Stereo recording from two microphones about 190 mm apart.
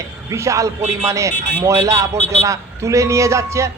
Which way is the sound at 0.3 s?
15° right (ahead or behind).